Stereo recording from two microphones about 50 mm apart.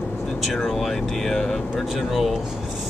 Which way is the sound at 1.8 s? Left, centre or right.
Centre.